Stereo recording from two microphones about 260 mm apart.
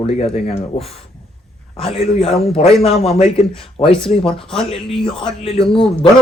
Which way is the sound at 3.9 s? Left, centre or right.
Centre.